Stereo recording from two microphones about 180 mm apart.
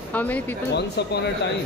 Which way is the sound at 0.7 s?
70° left (ahead or behind).